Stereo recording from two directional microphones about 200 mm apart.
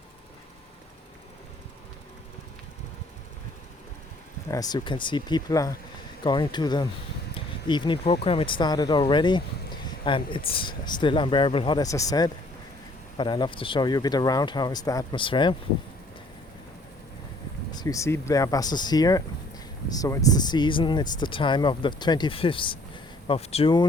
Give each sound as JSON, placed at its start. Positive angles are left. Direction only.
{"t": 4.5, "sound": "speech", "side_deg": 20}
{"t": 17.7, "sound": "speech", "side_deg": 20}